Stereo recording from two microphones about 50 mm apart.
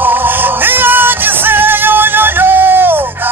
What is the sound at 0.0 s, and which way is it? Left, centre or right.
Music, right.